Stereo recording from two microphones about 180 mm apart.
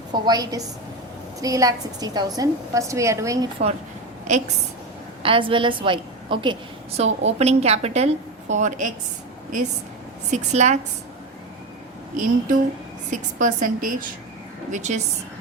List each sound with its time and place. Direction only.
0.1 s a woman's voice: 20° right (ahead or behind)
4.3 s a woman's voice: 40° right (ahead or behind)
5.2 s a woman's voice: 30° right (ahead or behind)
10.3 s a woman's voice: 40° right (ahead or behind)
12.1 s a woman's voice: 45° right (ahead or behind)